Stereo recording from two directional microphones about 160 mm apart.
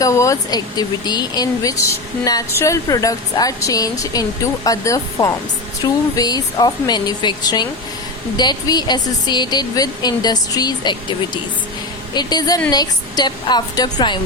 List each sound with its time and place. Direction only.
0.0 s speech: 20° left (ahead or behind)
12.1 s speech: 25° left (ahead or behind)